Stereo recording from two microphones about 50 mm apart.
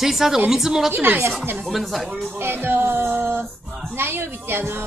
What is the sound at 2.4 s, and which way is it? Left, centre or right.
Music, right.